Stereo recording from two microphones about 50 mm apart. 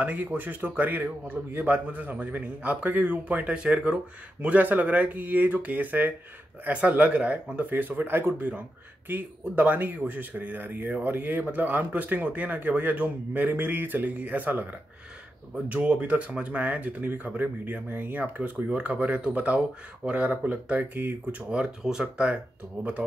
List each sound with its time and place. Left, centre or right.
0.0 s speech: right
3.5 s speech: centre
4.4 s speech: right
7.5 s speech: right
15.7 s speech: right
22.0 s speech: right
22.8 s speech: right